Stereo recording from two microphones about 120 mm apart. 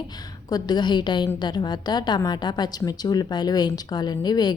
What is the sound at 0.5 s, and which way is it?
A woman's voice, 35° left (ahead or behind).